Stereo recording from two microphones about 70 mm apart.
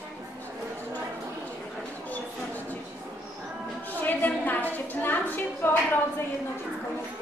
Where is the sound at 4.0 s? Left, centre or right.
Left.